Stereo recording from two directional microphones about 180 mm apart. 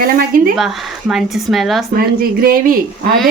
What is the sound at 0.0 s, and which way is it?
Speech, 50° right (ahead or behind).